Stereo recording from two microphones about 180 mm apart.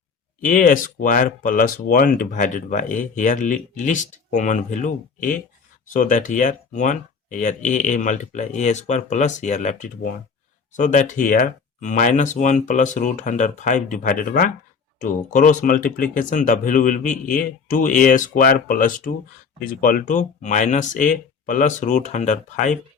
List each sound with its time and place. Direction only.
0.4 s speech: 45° left (ahead or behind)